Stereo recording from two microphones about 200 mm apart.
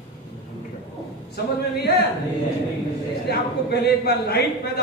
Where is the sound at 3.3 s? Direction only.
55° left (ahead or behind).